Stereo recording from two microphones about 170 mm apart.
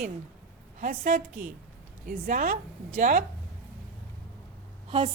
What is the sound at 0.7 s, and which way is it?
A woman's voice, 55° right (ahead or behind).